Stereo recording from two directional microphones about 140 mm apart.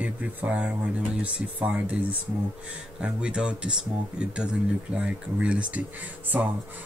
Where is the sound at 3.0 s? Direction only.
5° right (ahead or behind).